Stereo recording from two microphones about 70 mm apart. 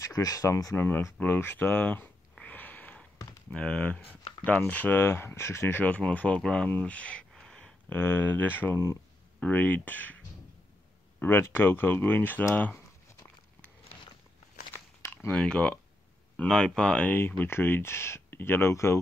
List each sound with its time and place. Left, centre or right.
0.0 s speech: left
0.7 s speech: left
2.4 s a sound: left
3.5 s speech: centre; by 5.8 s left
5.8 s speech: left
6.8 s a sound: centre
7.9 s speech: left
11.1 s speech: left
14.7 s biting: left
15.3 s speech: centre
17.0 s speech: left